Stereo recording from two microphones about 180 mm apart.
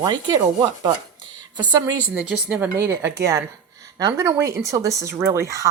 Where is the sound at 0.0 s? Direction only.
20° right (ahead or behind).